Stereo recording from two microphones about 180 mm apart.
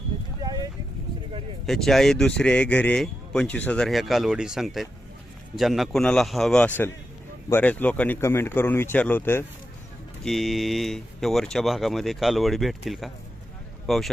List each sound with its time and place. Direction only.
0.4 s vehicle: 20° right (ahead or behind)
1.6 s speech: centre (ahead or behind)
10.2 s speech: centre (ahead or behind)